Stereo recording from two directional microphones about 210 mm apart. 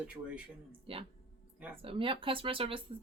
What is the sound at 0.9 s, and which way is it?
Speech, 25° right (ahead or behind).